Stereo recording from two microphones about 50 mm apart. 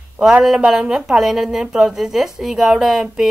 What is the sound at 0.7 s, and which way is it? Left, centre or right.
Speech, centre.